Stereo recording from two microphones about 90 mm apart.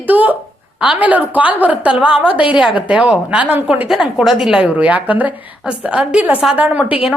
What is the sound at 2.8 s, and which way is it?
A woman's voice, 15° right (ahead or behind).